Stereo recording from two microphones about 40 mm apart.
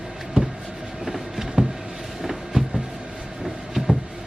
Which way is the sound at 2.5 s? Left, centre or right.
Right.